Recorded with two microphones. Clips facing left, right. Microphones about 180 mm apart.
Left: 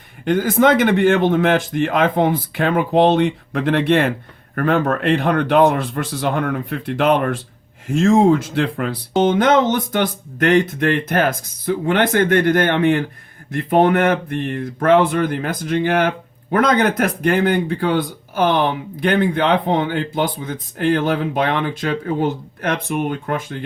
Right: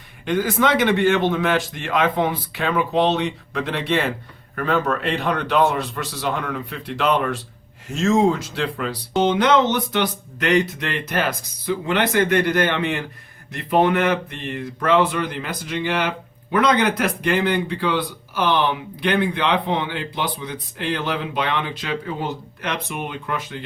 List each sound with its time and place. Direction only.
0.3 s speech: 50° left (ahead or behind)